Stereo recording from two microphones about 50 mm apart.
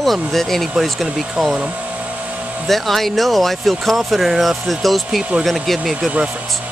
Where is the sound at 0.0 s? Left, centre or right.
Centre.